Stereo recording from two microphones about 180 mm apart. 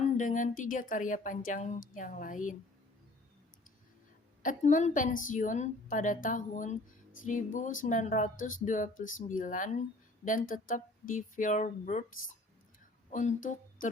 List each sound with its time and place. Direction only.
0.2 s speech: 45° left (ahead or behind)
4.4 s speech: 45° left (ahead or behind)